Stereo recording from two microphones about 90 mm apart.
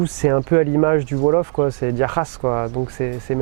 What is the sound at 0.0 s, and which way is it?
Speech, 15° right (ahead or behind).